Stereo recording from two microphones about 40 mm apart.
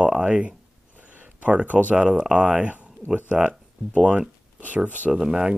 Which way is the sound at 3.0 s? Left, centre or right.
Left.